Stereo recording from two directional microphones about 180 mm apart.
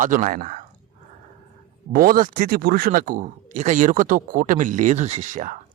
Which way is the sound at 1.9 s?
55° right (ahead or behind).